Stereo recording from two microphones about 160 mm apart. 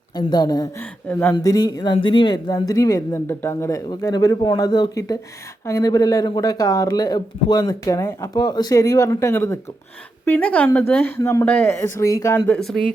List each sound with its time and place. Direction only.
0.2 s speech: 25° left (ahead or behind)
0.8 s speech: 10° left (ahead or behind)